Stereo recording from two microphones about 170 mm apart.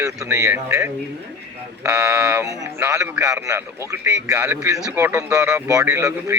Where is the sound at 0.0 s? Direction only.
20° right (ahead or behind).